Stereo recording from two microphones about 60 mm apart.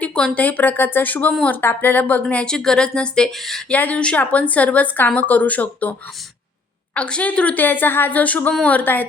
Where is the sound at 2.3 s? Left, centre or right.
Centre.